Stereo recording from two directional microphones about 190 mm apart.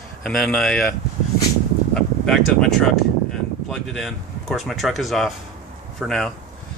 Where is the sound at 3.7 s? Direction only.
Centre (ahead or behind).